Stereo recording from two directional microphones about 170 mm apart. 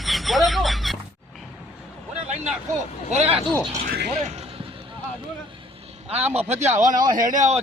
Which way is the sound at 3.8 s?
70° right (ahead or behind).